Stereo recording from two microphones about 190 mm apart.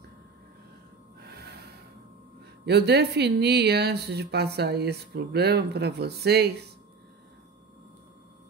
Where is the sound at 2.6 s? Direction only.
60° right (ahead or behind).